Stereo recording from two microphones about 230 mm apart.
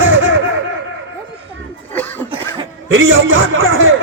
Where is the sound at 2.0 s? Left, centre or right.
Centre.